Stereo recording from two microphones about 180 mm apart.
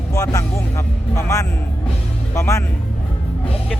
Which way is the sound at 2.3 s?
15° left (ahead or behind).